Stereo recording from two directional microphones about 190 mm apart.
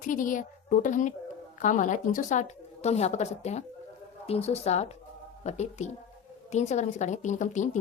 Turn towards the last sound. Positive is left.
turn(degrees=40)  # may be behind; listen again after turning